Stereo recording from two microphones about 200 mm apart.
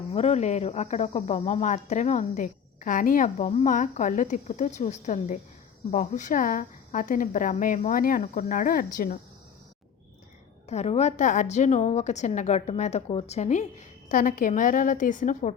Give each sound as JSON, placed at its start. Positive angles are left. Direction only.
{"t": 0.1, "sound": "speech", "side_deg": 30}
{"t": 10.7, "sound": "speech", "side_deg": 35}